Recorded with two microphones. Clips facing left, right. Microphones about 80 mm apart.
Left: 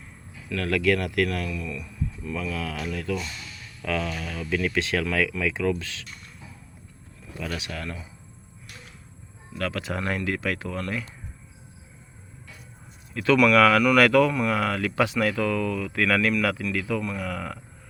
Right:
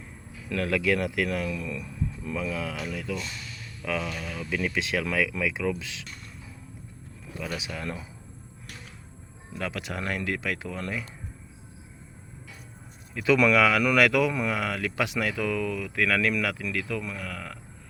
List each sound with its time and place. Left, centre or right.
0.5 s speech: centre
1.5 s speech: right
2.3 s speech: centre
7.4 s speech: centre
9.6 s speech: centre
13.1 s speech: centre